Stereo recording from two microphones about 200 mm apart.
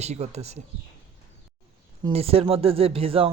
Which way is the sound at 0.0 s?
35° right (ahead or behind).